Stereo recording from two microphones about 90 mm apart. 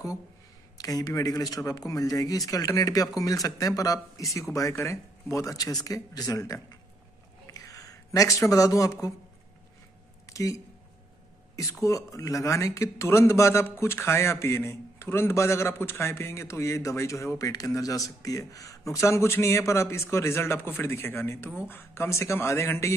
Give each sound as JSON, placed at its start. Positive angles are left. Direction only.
{"t": 0.7, "sound": "a man's voice", "side_deg": 45}
{"t": 10.2, "sound": "a sound", "side_deg": 40}
{"t": 11.8, "sound": "a man's voice", "side_deg": 35}